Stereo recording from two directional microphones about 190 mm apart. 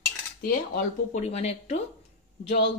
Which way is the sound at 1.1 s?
35° left (ahead or behind).